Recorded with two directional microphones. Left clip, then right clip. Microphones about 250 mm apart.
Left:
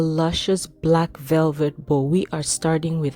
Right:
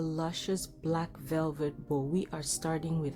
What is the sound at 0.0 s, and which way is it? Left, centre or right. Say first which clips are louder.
Speech: left 13 dB; left.